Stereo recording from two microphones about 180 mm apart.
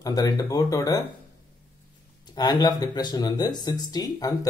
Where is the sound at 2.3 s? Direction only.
25° left (ahead or behind).